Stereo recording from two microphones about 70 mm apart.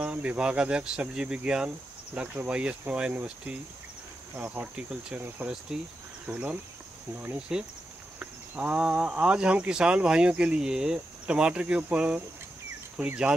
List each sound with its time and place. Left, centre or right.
0.0 s speech: centre
4.4 s cricket: centre
7.5 s speech: centre